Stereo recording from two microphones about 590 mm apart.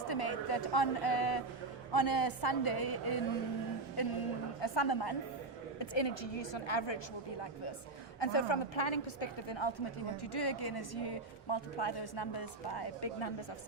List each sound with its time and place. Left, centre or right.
0.1 s a woman's voice: left
8.2 s a woman's voice: left